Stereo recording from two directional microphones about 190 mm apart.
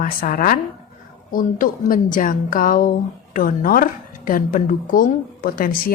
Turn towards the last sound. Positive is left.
turn(degrees=50)  # may be behind; listen again after turning